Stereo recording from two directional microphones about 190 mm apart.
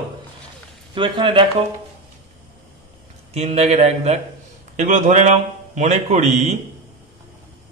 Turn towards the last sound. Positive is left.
turn(degrees=-35)  # may be behind; listen again after turning